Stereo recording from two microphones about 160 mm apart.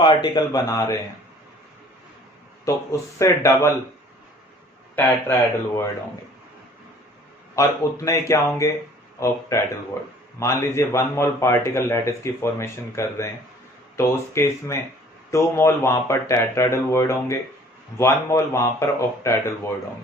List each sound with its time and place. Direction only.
0.0 s a man's voice: 30° left (ahead or behind)
2.6 s a man's voice: 20° left (ahead or behind)
4.9 s a man's voice: 15° left (ahead or behind)
7.5 s a man's voice: 20° left (ahead or behind)